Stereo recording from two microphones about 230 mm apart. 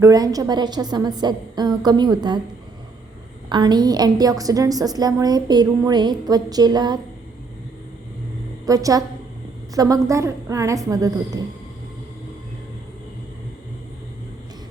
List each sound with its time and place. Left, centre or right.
0.0 s a woman's voice: centre
3.5 s a woman's voice: centre
8.6 s a woman's voice: centre